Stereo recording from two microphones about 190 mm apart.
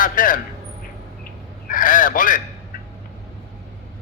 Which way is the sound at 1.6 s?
45° left (ahead or behind).